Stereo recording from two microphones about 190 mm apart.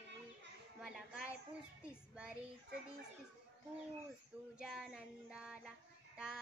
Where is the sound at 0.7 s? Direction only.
5° right (ahead or behind).